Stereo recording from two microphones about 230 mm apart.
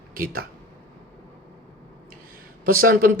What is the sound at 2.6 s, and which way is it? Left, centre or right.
Speech, right.